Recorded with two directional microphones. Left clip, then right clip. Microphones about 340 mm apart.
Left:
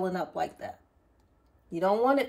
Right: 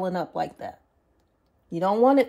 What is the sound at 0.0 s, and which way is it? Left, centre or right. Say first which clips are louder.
Speech: right 3 dB; right.